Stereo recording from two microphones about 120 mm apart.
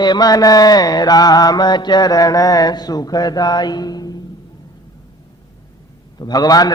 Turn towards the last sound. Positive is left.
turn(degrees=35)  # may be behind; listen again after turning